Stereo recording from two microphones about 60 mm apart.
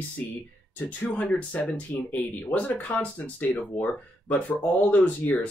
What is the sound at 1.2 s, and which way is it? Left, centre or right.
Speech, left.